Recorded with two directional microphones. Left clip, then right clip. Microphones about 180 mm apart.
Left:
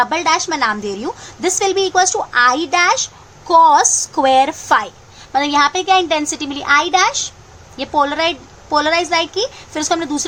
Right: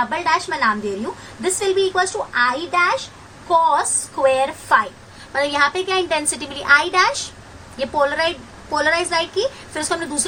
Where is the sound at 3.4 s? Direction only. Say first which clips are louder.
Left 6 dB; 65° left (ahead or behind).